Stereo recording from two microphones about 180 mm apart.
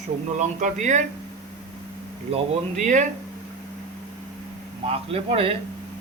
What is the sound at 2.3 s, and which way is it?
Speech, 45° right (ahead or behind).